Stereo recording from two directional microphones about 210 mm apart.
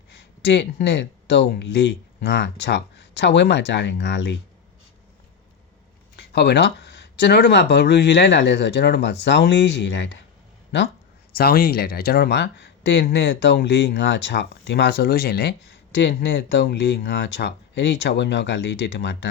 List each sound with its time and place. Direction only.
0.1 s speech: 55° left (ahead or behind)
6.1 s speech: 50° left (ahead or behind)
11.3 s speech: 45° left (ahead or behind)